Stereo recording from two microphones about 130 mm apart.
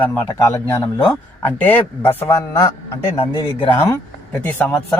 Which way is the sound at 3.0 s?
45° left (ahead or behind).